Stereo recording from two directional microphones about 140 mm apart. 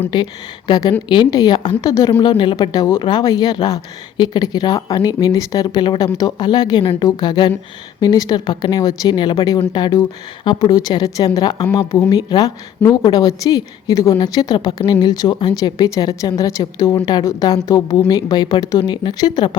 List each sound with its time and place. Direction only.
0.1 s a woman's voice: 30° left (ahead or behind)